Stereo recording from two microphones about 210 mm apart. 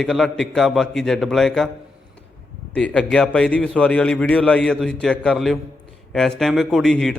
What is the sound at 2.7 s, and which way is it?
A man's voice, 5° left (ahead or behind).